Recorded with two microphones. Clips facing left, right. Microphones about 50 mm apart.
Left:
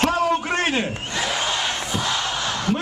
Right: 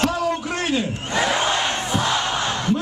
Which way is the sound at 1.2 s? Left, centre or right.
Centre.